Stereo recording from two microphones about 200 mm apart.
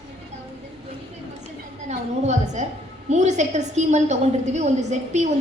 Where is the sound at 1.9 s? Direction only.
35° right (ahead or behind).